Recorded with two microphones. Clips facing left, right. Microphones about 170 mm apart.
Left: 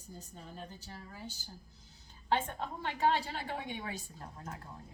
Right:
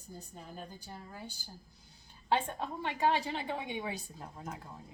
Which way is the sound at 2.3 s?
15° right (ahead or behind).